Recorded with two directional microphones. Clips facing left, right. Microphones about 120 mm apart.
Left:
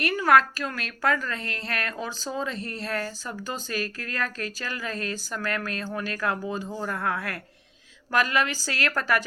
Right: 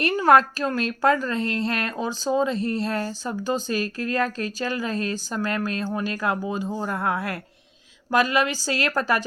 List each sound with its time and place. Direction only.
0.0 s a woman's voice: 25° right (ahead or behind)